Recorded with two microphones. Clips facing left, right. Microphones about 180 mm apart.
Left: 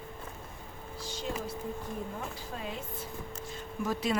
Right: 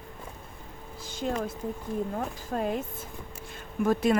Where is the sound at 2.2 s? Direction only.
50° right (ahead or behind).